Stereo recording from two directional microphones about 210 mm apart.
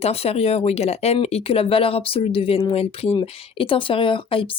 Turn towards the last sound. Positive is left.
turn(degrees=25)  # may be behind; listen again after turning